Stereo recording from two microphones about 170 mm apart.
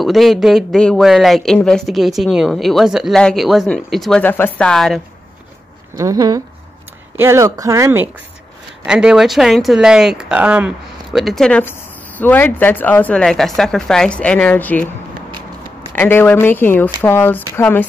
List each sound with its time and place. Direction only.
0.0 s speech: centre (ahead or behind)
5.9 s speech: 20° right (ahead or behind)
8.8 s speech: 5° right (ahead or behind)
15.9 s speech: 10° left (ahead or behind)